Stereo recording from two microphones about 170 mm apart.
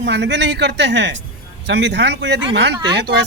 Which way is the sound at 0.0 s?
90° right.